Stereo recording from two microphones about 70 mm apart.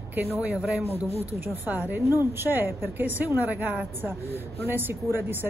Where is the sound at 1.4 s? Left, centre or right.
Right.